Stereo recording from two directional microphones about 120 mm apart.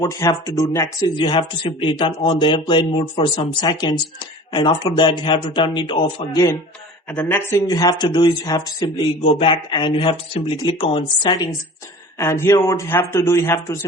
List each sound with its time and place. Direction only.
0.0 s speech: 30° left (ahead or behind)
1.1 s speech: 45° left (ahead or behind)
3.6 s speech: 35° left (ahead or behind)
6.3 s speech: 25° left (ahead or behind)
7.1 s speech: 15° left (ahead or behind)
7.5 s speech: 35° left (ahead or behind)
9.2 s speech: 45° left (ahead or behind)
12.1 s speech: 20° left (ahead or behind)